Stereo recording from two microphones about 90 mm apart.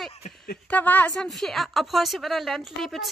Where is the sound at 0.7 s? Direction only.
20° left (ahead or behind).